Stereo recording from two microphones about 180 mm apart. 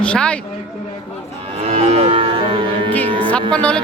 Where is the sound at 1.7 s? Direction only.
35° right (ahead or behind).